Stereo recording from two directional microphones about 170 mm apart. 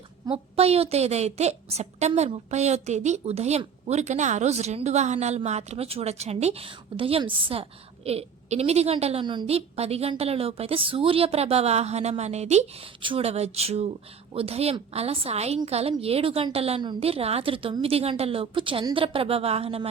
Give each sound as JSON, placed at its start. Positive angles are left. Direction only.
{"t": 0.3, "sound": "a woman's voice", "side_deg": -35}